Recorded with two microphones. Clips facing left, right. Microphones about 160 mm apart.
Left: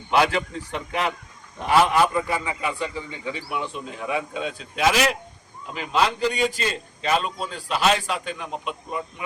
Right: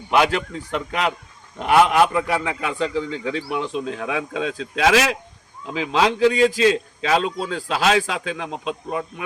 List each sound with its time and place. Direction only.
0.7 s a man's voice: 70° right (ahead or behind)